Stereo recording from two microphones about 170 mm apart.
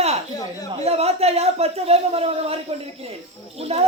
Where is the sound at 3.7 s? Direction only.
35° right (ahead or behind).